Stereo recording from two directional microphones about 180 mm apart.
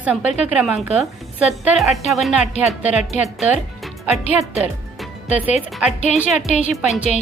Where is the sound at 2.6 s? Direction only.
40° left (ahead or behind).